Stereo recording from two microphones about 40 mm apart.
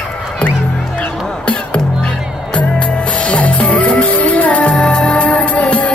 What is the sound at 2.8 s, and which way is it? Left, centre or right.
Music, left.